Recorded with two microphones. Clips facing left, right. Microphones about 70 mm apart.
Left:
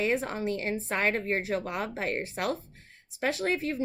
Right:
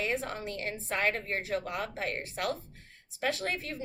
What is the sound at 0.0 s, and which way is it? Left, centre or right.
A woman's voice, left.